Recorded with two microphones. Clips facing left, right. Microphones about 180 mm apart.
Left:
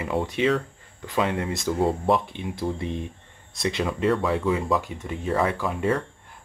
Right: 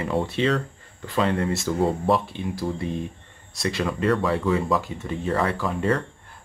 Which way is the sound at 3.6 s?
20° left (ahead or behind).